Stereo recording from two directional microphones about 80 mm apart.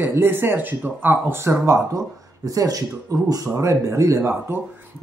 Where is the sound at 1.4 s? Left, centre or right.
Right.